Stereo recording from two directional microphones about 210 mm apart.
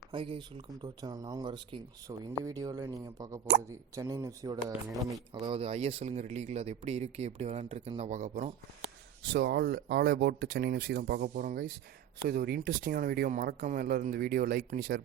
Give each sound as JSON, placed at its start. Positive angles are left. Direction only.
{"t": 0.1, "sound": "speech", "side_deg": -25}
{"t": 9.2, "sound": "speech", "side_deg": -55}